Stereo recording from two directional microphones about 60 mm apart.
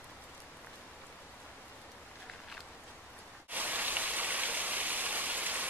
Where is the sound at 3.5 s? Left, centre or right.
Right.